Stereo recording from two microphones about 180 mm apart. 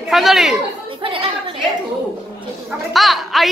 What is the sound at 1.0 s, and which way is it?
Chatter, 30° right (ahead or behind).